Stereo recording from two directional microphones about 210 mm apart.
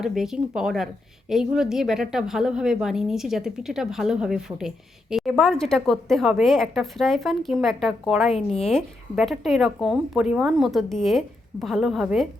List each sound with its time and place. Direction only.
0.0 s a woman's voice: centre (ahead or behind)